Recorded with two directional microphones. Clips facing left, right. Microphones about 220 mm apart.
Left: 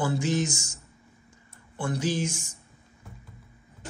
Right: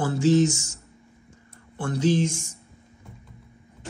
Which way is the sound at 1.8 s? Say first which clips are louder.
Right 5 dB; 10° left (ahead or behind).